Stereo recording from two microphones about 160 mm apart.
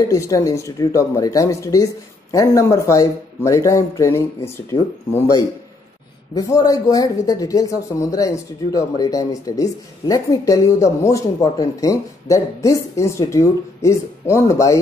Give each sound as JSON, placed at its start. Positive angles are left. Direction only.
{"t": 0.1, "sound": "a woman's voice", "side_deg": 20}